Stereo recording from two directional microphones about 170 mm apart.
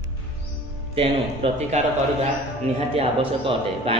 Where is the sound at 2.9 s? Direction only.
35° right (ahead or behind).